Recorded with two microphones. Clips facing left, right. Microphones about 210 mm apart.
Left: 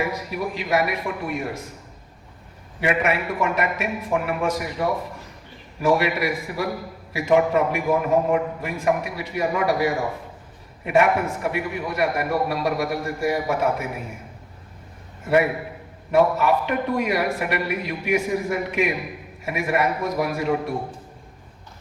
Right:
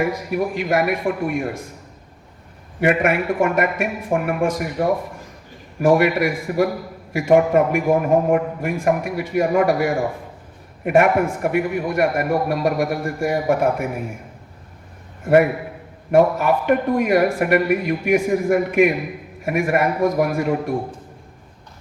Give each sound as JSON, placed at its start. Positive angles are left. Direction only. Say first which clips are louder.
{"t": 0.0, "sound": "a man's voice", "louder": "right 5 dB", "side_deg": -50}
{"t": 2.8, "sound": "a man's voice", "louder": "right 5 dB", "side_deg": -50}
{"t": 16.1, "sound": "a man's voice", "louder": "right 3 dB", "side_deg": -50}